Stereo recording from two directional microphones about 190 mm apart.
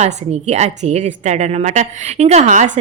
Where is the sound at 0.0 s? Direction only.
35° right (ahead or behind).